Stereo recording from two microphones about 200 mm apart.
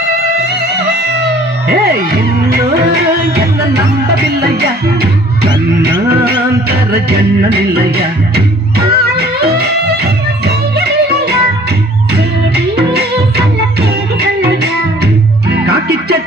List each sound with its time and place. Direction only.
1.6 s music: 50° right (ahead or behind)
12.9 s music: 55° right (ahead or behind)